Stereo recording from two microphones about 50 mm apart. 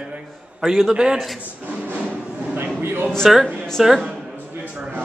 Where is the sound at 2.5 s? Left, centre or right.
Right.